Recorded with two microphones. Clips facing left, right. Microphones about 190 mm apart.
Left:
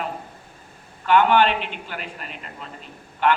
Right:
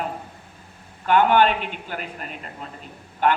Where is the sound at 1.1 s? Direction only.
45° right (ahead or behind).